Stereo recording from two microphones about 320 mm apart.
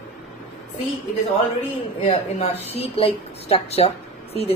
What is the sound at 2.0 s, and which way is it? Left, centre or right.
A woman's voice, centre.